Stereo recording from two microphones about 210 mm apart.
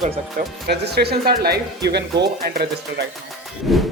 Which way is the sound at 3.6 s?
Centre (ahead or behind).